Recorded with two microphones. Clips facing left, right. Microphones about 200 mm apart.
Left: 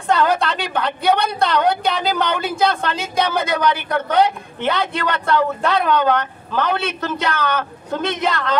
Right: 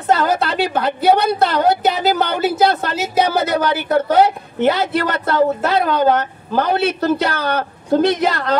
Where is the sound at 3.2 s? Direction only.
35° right (ahead or behind).